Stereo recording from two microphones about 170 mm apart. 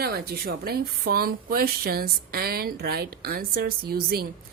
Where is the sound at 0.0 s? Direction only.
65° right (ahead or behind).